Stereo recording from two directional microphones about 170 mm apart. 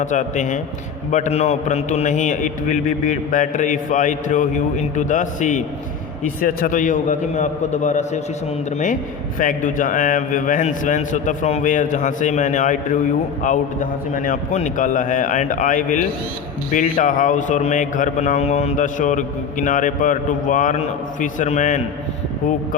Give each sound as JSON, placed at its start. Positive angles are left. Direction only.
{"t": 0.0, "sound": "a man's voice", "side_deg": 45}
{"t": 9.4, "sound": "a man's voice", "side_deg": 50}